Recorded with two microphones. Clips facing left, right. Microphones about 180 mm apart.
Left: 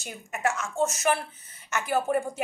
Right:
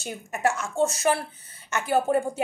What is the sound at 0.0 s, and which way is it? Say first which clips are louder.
A woman's voice: right 3 dB; 35° right (ahead or behind).